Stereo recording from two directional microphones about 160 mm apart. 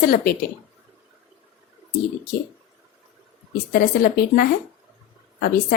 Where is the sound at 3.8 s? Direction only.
65° left (ahead or behind).